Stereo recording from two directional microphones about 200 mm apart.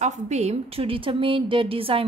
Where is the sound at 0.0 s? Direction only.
35° right (ahead or behind).